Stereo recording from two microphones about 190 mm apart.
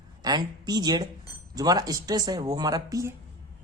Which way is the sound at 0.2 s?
20° right (ahead or behind).